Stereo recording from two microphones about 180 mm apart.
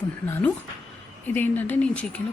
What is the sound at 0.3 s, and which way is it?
A woman's voice, 10° left (ahead or behind).